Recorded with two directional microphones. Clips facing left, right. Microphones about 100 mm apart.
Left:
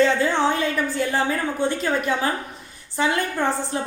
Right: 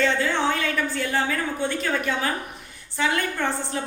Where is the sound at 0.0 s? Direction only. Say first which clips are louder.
Left 4 dB; 25° left (ahead or behind).